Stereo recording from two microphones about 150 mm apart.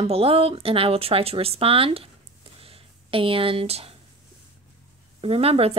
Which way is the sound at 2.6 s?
35° right (ahead or behind).